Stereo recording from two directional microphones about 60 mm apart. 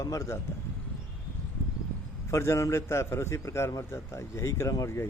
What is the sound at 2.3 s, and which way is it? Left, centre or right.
A man's voice, left.